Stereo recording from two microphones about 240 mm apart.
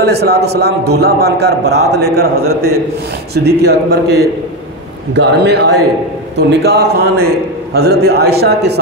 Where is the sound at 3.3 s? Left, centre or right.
Right.